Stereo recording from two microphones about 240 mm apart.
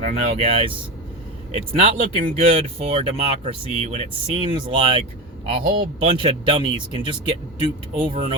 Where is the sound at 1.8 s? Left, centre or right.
Right.